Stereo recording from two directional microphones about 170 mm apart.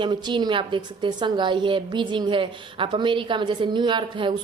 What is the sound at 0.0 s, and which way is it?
A woman's voice, 25° right (ahead or behind).